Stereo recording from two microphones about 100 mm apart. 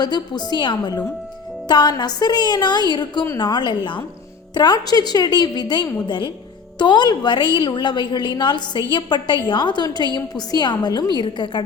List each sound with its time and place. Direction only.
0.0 s a woman's voice: 45° left (ahead or behind)